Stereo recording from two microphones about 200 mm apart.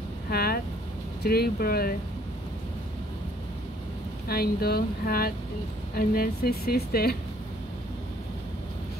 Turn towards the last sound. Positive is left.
turn(degrees=50)  # may be behind; listen again after turning